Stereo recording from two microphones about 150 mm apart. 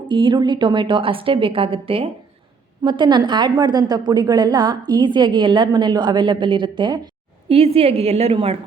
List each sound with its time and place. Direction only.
0.1 s a woman's voice: 30° right (ahead or behind)
7.4 s a woman's voice: 40° right (ahead or behind)